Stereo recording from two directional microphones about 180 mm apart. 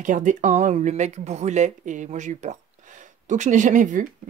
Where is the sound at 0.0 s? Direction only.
45° right (ahead or behind).